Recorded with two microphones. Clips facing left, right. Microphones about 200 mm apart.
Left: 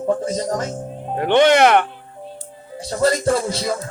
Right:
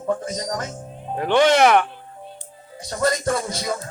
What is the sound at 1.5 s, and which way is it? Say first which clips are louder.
Music: left 2 dB; 60° left (ahead or behind).